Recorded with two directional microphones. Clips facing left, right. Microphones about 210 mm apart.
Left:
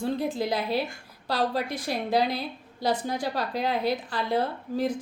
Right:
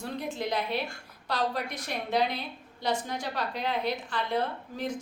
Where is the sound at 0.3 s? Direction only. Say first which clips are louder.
Left 4 dB; 35° left (ahead or behind).